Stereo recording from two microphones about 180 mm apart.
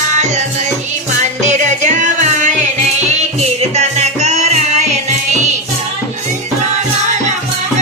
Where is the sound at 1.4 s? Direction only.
40° right (ahead or behind).